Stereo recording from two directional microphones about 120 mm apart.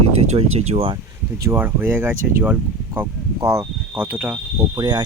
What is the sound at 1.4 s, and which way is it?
Speech, 20° right (ahead or behind).